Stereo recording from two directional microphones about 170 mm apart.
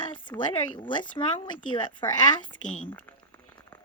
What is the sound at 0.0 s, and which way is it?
Speech, 25° left (ahead or behind).